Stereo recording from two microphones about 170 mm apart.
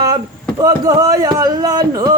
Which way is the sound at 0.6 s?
20° right (ahead or behind).